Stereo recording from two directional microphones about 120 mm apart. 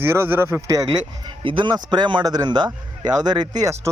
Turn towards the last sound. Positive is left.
turn(degrees=-35)  # may be behind; listen again after turning